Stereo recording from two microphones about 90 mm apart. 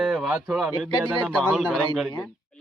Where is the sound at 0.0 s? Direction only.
5° right (ahead or behind).